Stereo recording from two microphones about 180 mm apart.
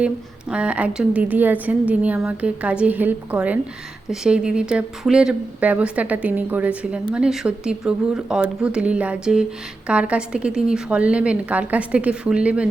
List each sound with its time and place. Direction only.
0.5 s speech: 5° right (ahead or behind)